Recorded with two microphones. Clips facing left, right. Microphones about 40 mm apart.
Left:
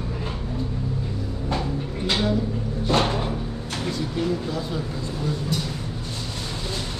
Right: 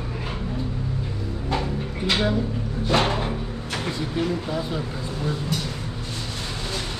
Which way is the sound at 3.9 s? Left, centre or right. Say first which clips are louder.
Left 1 dB; centre.